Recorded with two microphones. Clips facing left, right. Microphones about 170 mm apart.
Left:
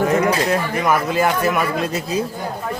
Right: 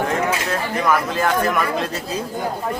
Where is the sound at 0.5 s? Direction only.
10° left (ahead or behind).